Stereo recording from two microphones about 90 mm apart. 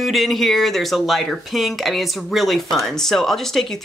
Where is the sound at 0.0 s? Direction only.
Centre (ahead or behind).